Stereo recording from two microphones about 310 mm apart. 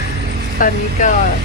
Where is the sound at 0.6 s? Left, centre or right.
Left.